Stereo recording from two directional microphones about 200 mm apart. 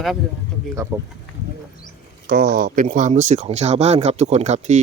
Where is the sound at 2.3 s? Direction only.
50° right (ahead or behind).